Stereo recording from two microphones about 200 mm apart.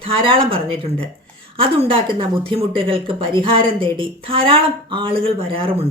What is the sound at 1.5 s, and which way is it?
A woman's voice, 25° right (ahead or behind).